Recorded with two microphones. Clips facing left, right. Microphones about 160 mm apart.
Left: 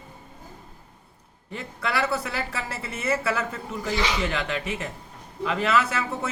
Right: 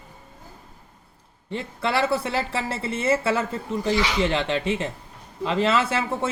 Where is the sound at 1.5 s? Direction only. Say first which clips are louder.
Right 4 dB; 30° right (ahead or behind).